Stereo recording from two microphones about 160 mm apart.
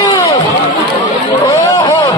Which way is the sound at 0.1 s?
20° left (ahead or behind).